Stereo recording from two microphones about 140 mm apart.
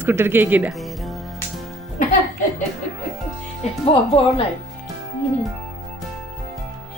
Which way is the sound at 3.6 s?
55° left (ahead or behind).